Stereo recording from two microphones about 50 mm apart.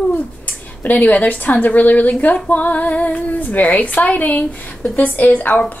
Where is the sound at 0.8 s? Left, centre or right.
Left.